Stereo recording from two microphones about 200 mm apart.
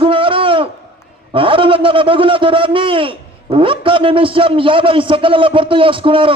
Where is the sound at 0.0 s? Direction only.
25° right (ahead or behind).